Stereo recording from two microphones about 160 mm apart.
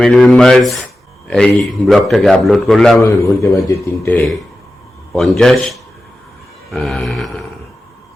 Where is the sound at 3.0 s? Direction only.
20° left (ahead or behind).